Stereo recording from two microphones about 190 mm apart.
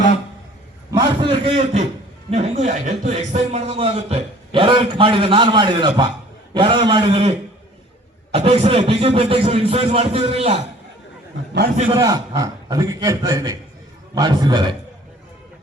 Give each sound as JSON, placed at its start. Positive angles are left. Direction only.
{"t": 0.9, "sound": "a man's voice", "side_deg": -25}
{"t": 11.9, "sound": "a man's voice", "side_deg": -20}